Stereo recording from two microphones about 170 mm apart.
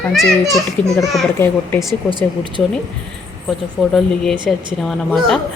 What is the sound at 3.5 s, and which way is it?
Speech, centre (ahead or behind).